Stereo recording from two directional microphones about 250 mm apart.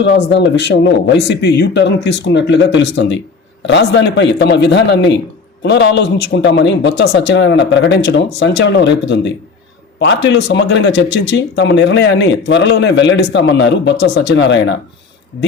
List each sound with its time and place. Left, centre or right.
0.0 s speech: left